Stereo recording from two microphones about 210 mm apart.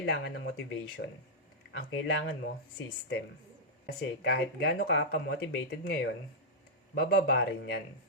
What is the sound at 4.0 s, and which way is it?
Speech, 50° left (ahead or behind).